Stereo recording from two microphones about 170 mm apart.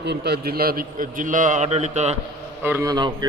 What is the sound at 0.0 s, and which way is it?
A man's voice, 80° right.